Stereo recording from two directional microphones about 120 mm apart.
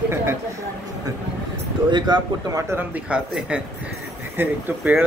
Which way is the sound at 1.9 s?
40° right (ahead or behind).